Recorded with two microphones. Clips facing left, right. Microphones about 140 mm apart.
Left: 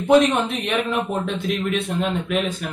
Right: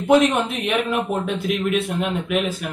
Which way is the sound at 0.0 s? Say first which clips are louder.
Even; centre (ahead or behind).